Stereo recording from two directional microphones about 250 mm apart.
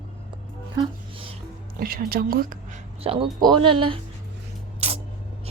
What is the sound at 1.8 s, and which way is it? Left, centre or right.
Speech, right.